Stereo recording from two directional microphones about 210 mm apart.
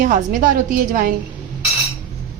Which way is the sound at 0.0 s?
40° right (ahead or behind).